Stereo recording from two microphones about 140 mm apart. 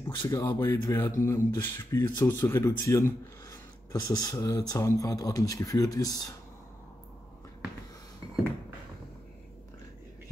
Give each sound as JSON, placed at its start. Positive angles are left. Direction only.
{"t": 0.3, "sound": "speech", "side_deg": 25}